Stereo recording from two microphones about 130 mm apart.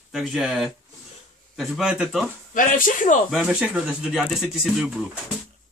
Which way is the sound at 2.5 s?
85° left.